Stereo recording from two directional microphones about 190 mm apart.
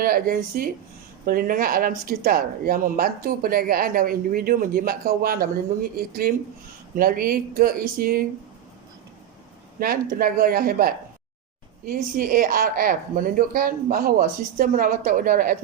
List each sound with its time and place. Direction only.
0.0 s speech: 50° right (ahead or behind)
9.8 s speech: 50° right (ahead or behind)